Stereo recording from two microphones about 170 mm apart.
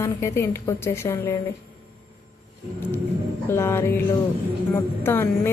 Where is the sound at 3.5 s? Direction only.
15° left (ahead or behind).